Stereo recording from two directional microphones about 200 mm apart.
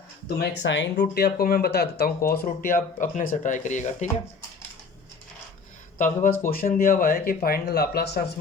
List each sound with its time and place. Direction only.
0.3 s speech: 65° left (ahead or behind); by 4.1 s 35° left (ahead or behind)
6.4 s speech: 45° left (ahead or behind)